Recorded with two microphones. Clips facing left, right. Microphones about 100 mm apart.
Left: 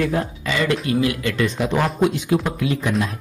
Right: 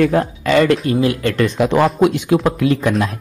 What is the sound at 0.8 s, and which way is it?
Speech, 35° right (ahead or behind).